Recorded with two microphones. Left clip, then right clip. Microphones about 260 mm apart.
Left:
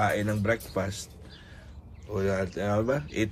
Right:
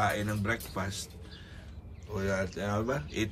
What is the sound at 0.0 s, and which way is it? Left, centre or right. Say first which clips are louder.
Speech: left 4 dB; centre.